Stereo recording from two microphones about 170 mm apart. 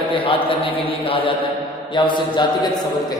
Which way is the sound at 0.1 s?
30° left (ahead or behind).